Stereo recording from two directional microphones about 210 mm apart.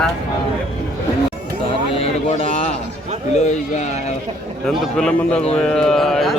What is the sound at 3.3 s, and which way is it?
Speech, 30° left (ahead or behind).